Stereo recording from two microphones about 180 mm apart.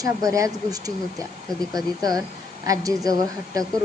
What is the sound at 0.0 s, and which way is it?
A woman's voice, 20° right (ahead or behind).